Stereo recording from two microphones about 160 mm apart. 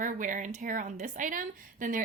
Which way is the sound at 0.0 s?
55° right (ahead or behind).